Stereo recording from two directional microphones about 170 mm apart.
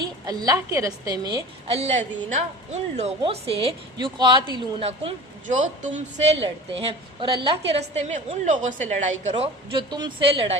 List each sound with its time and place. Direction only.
0.3 s a woman's voice: 20° right (ahead or behind)
1.7 s a woman's voice: 40° right (ahead or behind)
5.5 s a woman's voice: 45° right (ahead or behind)
6.4 s a woman's voice: 30° right (ahead or behind)
9.7 s a woman's voice: 25° right (ahead or behind)